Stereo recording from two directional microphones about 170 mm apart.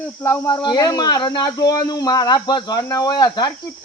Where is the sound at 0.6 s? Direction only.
25° left (ahead or behind).